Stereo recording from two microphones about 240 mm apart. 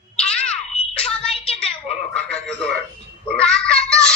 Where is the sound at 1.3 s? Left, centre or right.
Left.